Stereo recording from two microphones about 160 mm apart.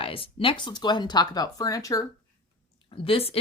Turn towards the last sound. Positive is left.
turn(degrees=35)  # may be behind; listen again after turning